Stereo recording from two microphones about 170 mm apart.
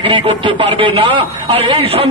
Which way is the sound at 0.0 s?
30° right (ahead or behind).